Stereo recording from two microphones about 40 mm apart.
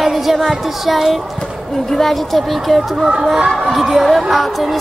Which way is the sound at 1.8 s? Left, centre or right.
Centre.